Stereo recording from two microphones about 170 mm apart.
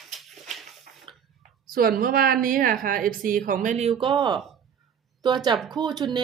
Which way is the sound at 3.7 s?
35° right (ahead or behind).